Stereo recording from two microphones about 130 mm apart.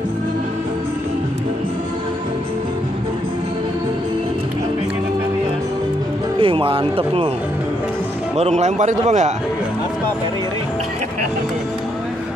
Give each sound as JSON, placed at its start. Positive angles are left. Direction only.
{"t": 6.4, "sound": "speech", "side_deg": -45}
{"t": 8.4, "sound": "a man's voice", "side_deg": -60}